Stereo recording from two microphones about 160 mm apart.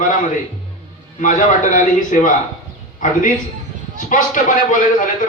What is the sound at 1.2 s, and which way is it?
A man's voice, 55° left (ahead or behind).